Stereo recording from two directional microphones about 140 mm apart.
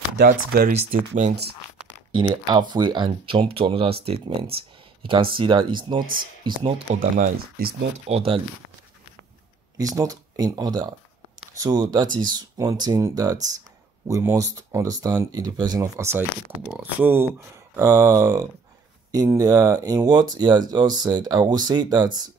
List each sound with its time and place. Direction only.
0.2 s speech: 90° right
0.9 s speech: 65° right (ahead or behind)
2.1 s speech: 35° right (ahead or behind)
7.2 s speech: 90° right
8.1 s speech: 45° right (ahead or behind)
9.8 s speech: 25° right (ahead or behind)